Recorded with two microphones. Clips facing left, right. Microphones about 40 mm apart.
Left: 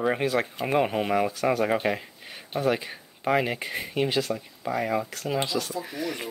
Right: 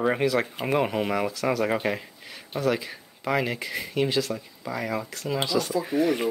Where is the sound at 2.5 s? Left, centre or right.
Left.